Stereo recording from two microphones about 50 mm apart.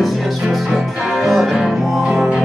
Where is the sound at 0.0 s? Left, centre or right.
Centre.